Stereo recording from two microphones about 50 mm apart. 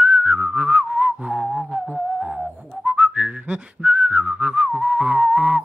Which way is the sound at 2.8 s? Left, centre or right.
Right.